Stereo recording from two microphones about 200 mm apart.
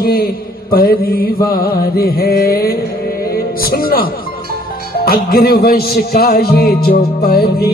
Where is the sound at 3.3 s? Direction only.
50° left (ahead or behind).